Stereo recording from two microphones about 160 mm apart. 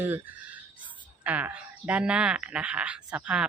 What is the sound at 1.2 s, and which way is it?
A woman's voice, 10° right (ahead or behind).